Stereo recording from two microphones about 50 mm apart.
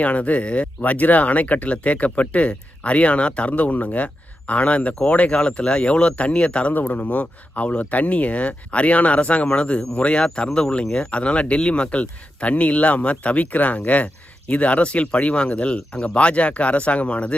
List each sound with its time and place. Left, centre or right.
0.0 s speech: left